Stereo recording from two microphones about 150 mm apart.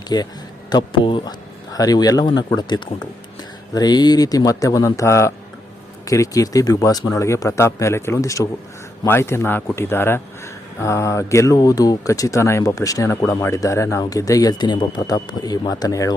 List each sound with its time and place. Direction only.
0.1 s a man's voice: 25° left (ahead or behind)